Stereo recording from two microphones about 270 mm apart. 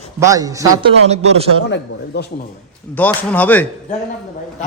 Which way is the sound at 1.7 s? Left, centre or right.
Left.